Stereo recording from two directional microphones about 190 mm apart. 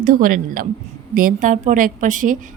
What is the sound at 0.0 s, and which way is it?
A woman's voice, 45° right (ahead or behind).